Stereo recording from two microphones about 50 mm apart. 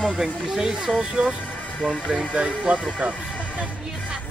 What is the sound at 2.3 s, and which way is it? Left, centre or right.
Speech, right.